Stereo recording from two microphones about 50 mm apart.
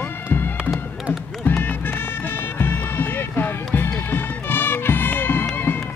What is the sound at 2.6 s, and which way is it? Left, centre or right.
Music, left.